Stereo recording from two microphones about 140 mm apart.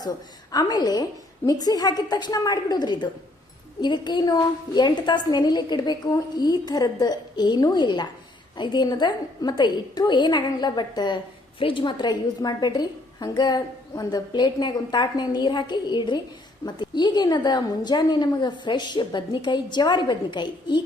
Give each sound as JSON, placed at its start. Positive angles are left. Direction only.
{"t": 0.5, "sound": "a woman's voice", "side_deg": 30}